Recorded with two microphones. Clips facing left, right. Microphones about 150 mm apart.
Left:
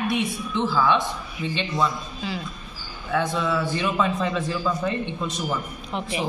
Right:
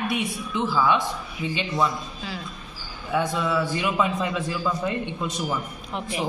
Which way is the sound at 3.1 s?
10° right (ahead or behind).